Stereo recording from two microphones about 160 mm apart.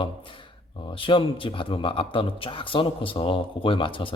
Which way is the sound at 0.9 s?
30° left (ahead or behind).